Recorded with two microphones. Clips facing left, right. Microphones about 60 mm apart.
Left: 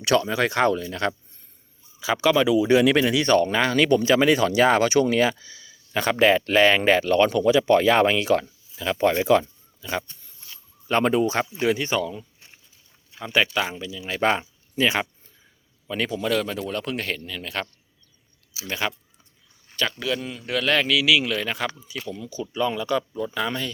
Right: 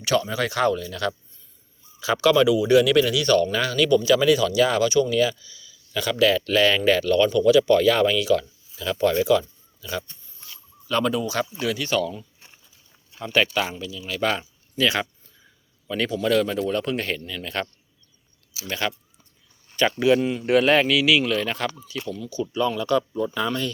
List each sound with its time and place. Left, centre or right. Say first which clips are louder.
0.1 s speech: left 2 dB; left
2.0 s speech: right 2 dB; centre; by 5.1 s left
5.1 s speech: even; left
8.7 s speech: even; left
11.9 s speech: right 2 dB; centre
13.7 s speech: left 1 dB; left
15.9 s a man's voice: right 2 dB; centre
18.7 s speech: even; centre
19.7 s a man's voice: right 7 dB; centre
20.7 s a man's voice: right 2 dB; centre
22.1 s speech: right 5 dB; left; by 23.5 s centre